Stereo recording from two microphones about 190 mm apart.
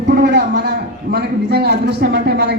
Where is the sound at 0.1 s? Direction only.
60° right (ahead or behind).